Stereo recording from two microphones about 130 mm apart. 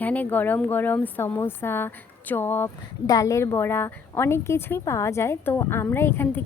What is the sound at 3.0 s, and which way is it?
Speech, 25° left (ahead or behind).